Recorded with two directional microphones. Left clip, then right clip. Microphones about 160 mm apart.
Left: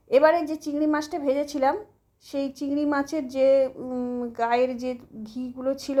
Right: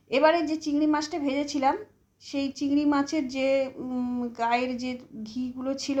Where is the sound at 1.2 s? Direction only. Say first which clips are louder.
Left 4 dB; 55° left (ahead or behind).